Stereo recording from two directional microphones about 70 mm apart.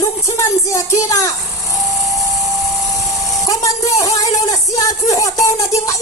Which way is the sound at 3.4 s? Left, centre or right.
Left.